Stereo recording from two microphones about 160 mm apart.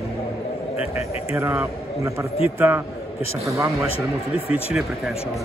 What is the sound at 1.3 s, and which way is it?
Speech, 15° right (ahead or behind).